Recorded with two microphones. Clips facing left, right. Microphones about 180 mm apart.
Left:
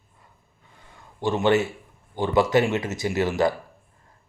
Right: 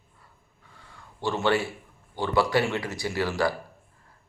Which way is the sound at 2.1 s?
20° left (ahead or behind).